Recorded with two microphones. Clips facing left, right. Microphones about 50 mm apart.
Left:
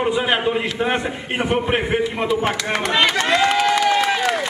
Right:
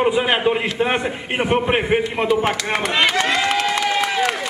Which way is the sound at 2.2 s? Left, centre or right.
Centre.